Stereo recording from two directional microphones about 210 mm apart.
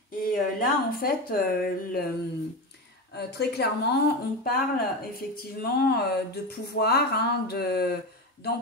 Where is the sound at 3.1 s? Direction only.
50° left (ahead or behind).